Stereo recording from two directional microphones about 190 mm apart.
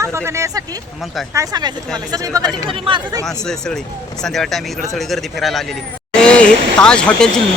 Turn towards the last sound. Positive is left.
turn(degrees=5)  # may be behind; listen again after turning